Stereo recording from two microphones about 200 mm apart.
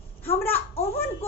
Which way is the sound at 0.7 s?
30° left (ahead or behind).